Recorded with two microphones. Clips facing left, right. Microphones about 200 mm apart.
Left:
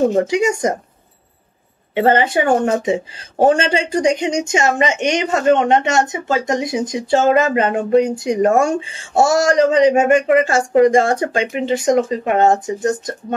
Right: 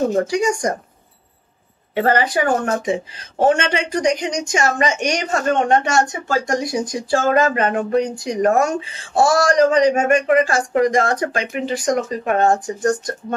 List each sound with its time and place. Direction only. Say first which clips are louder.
0.1 s speech: left 2 dB; 25° left (ahead or behind)
2.0 s speech: left 3 dB; 25° left (ahead or behind)